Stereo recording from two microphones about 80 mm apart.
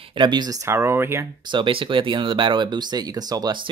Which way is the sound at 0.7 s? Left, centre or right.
Right.